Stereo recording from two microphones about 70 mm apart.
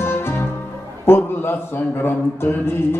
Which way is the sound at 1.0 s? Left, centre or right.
Left.